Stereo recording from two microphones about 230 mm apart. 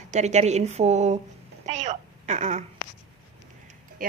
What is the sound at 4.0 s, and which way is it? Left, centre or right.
Speech, right.